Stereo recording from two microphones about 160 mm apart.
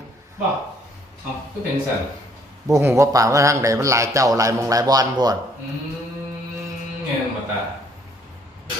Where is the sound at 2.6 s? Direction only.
20° right (ahead or behind).